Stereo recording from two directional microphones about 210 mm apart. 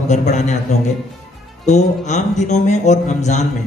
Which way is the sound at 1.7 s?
35° left (ahead or behind).